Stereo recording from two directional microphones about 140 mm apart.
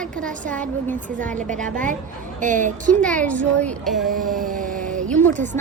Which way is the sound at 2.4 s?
65° right (ahead or behind).